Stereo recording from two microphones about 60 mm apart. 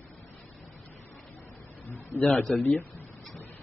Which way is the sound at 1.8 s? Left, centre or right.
Left.